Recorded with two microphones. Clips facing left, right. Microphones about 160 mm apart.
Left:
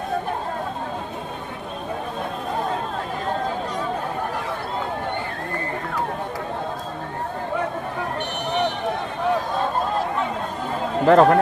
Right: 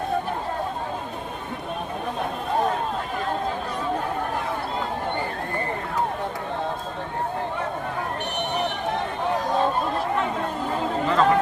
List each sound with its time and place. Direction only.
11.0 s a man's voice: 60° left (ahead or behind)